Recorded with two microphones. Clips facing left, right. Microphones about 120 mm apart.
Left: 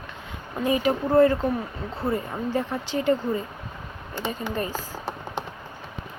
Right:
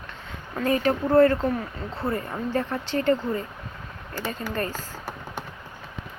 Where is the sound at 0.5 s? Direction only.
15° left (ahead or behind).